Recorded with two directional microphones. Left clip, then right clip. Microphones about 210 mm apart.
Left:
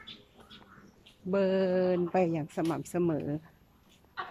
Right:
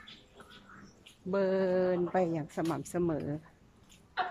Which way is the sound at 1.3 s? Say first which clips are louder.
Left 2 dB; 5° left (ahead or behind).